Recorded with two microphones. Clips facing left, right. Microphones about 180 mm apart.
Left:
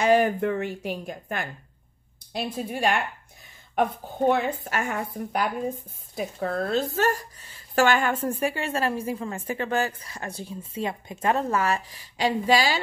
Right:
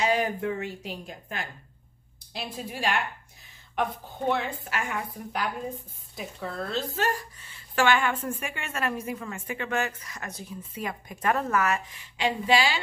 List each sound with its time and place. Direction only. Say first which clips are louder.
0.0 s a woman's voice: left 6 dB; 55° left (ahead or behind)
4.3 s a woman's voice: left 3 dB; 45° left (ahead or behind)